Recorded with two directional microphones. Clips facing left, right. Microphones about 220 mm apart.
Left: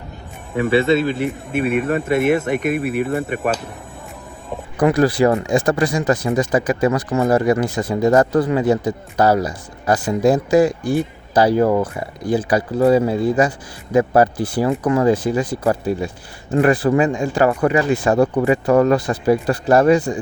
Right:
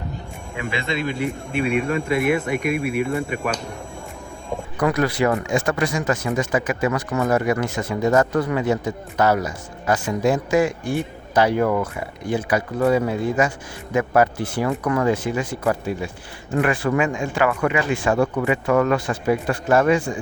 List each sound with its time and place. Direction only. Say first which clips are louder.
0.6 s speech: left 10 dB; 35° left (ahead or behind)
1.2 s speech: left 3 dB; 5° left (ahead or behind)
4.8 s speech: left 5 dB; 30° left (ahead or behind)